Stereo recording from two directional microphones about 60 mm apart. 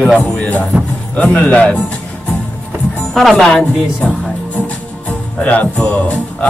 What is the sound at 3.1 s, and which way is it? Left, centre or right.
Speech, centre.